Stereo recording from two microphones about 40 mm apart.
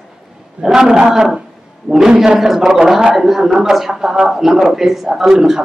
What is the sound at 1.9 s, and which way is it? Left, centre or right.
Speech, right.